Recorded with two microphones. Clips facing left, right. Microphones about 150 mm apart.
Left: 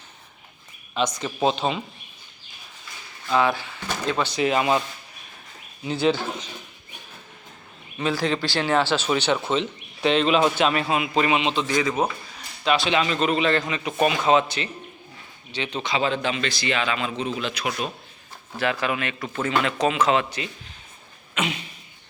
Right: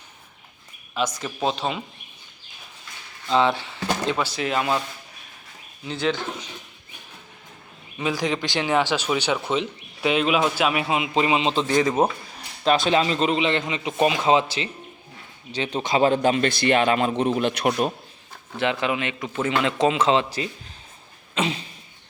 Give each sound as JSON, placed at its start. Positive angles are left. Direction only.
{"t": 0.9, "sound": "speech", "side_deg": -5}
{"t": 3.2, "sound": "speech", "side_deg": -25}
{"t": 4.2, "sound": "speech", "side_deg": 0}
{"t": 5.8, "sound": "speech", "side_deg": 10}
{"t": 7.9, "sound": "speech", "side_deg": -15}
{"t": 13.0, "sound": "a sound", "side_deg": -30}
{"t": 13.3, "sound": "speech", "side_deg": -20}
{"t": 15.5, "sound": "speech", "side_deg": -45}
{"t": 18.6, "sound": "speech", "side_deg": -20}
{"t": 21.3, "sound": "a sound", "side_deg": -30}